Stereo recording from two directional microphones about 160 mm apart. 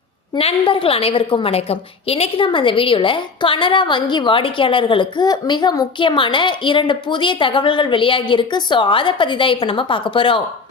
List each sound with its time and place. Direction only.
0.3 s a woman's voice: 35° left (ahead or behind)